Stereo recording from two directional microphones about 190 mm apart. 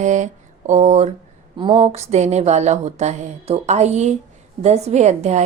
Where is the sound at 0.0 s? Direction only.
40° right (ahead or behind).